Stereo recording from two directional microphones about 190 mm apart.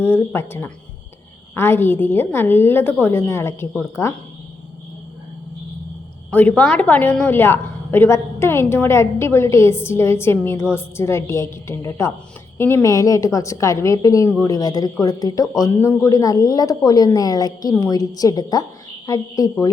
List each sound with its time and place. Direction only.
0.0 s a woman's voice: 10° left (ahead or behind)
6.6 s a woman's voice: 5° left (ahead or behind)